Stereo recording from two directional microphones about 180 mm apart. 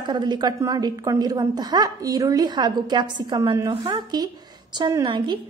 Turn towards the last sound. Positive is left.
turn(degrees=-25)  # may be behind; listen again after turning